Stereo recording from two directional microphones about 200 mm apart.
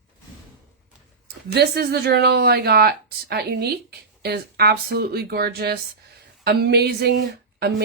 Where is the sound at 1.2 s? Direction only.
55° right (ahead or behind).